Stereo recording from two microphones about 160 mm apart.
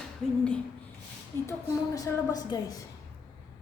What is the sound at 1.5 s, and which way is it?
A woman's voice, 20° left (ahead or behind).